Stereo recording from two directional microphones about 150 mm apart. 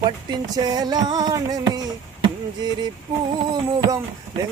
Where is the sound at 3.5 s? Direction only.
25° right (ahead or behind).